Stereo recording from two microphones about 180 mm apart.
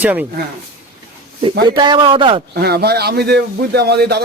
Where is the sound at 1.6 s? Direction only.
25° right (ahead or behind).